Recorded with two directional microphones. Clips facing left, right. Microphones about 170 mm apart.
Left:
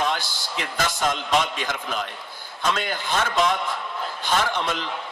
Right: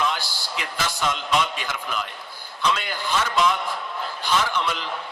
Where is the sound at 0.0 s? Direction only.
50° left (ahead or behind).